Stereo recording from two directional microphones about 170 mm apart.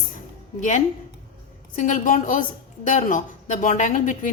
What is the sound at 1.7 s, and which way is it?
A woman's voice, 50° left (ahead or behind).